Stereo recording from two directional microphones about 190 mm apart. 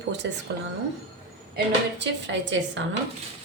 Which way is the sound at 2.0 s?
70° right (ahead or behind).